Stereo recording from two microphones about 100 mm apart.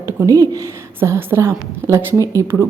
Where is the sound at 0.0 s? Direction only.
30° right (ahead or behind).